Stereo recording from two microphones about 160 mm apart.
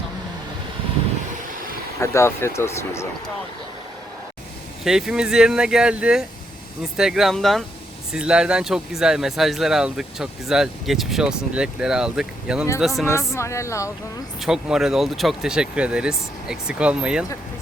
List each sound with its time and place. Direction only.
2.0 s speech: 15° left (ahead or behind)
4.8 s speech: 5° right (ahead or behind)
13.3 s speech: 20° left (ahead or behind)
14.4 s speech: 5° right (ahead or behind)